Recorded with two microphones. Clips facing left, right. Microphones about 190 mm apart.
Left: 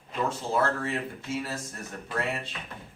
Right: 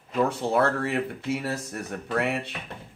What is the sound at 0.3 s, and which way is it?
Speech, 65° right (ahead or behind).